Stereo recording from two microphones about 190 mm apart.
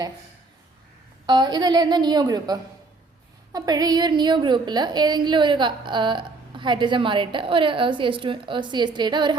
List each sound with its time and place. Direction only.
1.3 s a woman's voice: 20° right (ahead or behind)